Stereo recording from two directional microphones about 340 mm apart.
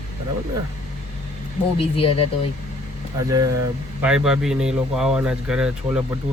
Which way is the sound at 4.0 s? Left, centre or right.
Centre.